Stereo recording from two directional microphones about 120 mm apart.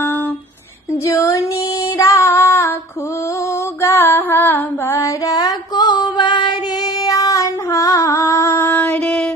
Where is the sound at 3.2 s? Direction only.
25° left (ahead or behind).